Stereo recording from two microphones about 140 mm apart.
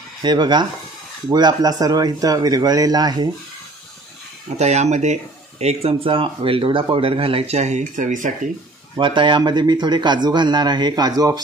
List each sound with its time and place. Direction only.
0.2 s a man's voice: 30° right (ahead or behind)
4.6 s speech: 55° right (ahead or behind)
8.9 s a man's voice: 35° right (ahead or behind)